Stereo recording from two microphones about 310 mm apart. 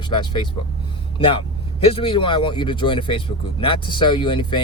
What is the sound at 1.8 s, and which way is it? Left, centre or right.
Speech, centre.